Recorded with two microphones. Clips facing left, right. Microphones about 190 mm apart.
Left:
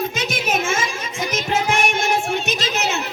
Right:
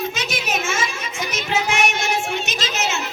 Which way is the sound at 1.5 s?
55° left (ahead or behind).